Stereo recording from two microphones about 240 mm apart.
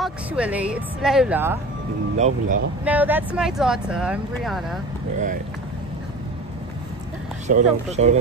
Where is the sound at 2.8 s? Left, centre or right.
Centre.